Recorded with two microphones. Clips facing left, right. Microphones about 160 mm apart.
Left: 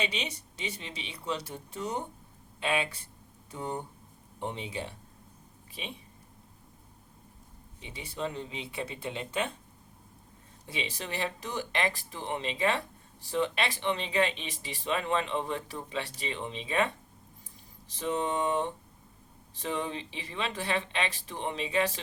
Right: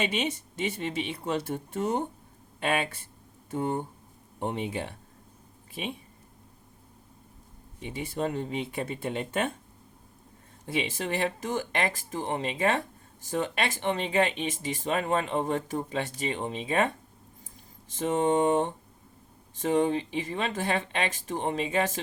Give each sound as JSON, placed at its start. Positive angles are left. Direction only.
{"t": 0.0, "sound": "speech", "side_deg": -50}
{"t": 7.8, "sound": "speech", "side_deg": -50}
{"t": 10.7, "sound": "speech", "side_deg": -50}
{"t": 17.9, "sound": "speech", "side_deg": -50}